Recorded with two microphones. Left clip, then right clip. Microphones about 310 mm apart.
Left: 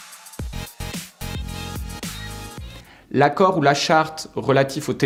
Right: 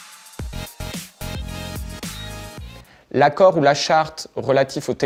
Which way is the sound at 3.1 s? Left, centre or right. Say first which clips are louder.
Right 3 dB; left.